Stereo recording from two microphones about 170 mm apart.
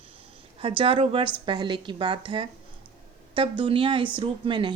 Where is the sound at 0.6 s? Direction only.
30° right (ahead or behind).